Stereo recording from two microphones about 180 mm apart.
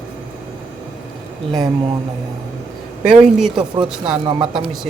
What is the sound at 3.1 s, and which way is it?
Speech, 5° right (ahead or behind).